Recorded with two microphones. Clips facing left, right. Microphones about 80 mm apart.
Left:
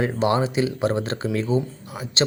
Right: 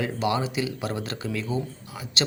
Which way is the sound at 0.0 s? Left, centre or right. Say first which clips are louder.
Left 5 dB; left.